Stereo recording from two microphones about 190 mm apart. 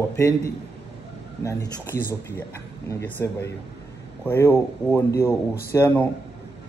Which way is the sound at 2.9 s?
10° left (ahead or behind).